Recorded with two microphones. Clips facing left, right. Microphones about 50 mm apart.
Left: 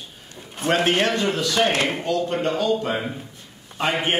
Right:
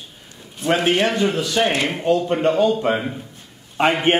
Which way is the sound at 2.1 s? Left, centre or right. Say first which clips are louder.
Right 8 dB; right.